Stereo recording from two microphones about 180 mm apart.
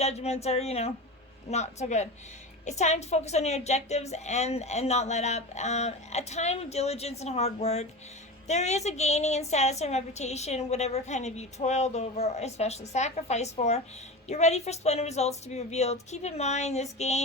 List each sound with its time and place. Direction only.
0.0 s a woman's voice: 35° left (ahead or behind)